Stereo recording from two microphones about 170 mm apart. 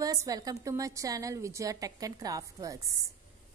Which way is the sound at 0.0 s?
20° right (ahead or behind).